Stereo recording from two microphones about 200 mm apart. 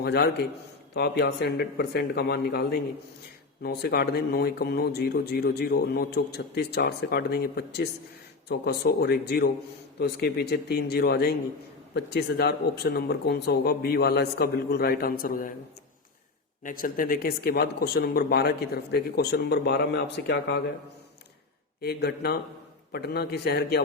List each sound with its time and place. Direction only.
0.0 s speech: 55° left (ahead or behind)
16.6 s speech: 45° left (ahead or behind); by 20.6 s 60° left (ahead or behind)
21.8 s speech: 50° left (ahead or behind)